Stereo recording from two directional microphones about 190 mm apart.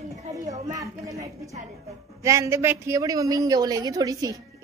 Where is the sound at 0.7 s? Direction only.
15° right (ahead or behind).